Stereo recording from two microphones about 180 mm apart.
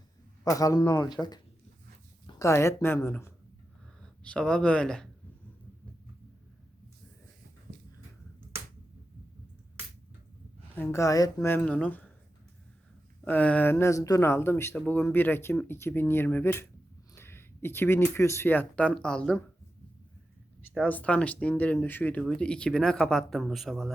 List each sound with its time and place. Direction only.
0.4 s speech: 20° left (ahead or behind)
10.8 s speech: 15° left (ahead or behind)
13.2 s speech: 10° left (ahead or behind)
20.8 s speech: 10° left (ahead or behind)